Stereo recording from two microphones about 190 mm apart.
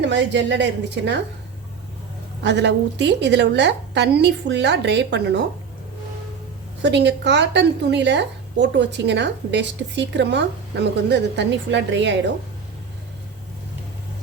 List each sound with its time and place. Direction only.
0.0 s a woman's voice: 70° right (ahead or behind)
2.4 s a woman's voice: 65° right (ahead or behind)
6.8 s a woman's voice: 65° right (ahead or behind)